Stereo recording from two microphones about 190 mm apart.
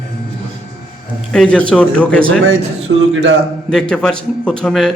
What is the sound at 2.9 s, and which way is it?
Speech, 70° right (ahead or behind).